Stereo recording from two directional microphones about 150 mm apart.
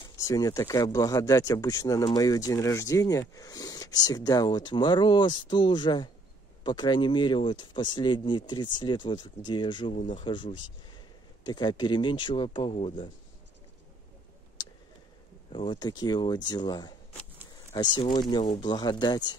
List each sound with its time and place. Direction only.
0.2 s speech: 25° left (ahead or behind)
15.5 s speech: 35° left (ahead or behind)